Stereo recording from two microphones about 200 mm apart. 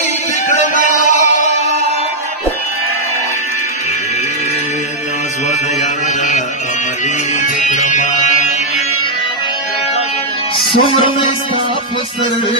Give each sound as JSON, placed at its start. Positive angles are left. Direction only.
{"t": 1.0, "sound": "music", "side_deg": 40}
{"t": 7.4, "sound": "music", "side_deg": 40}
{"t": 10.8, "sound": "speech", "side_deg": 25}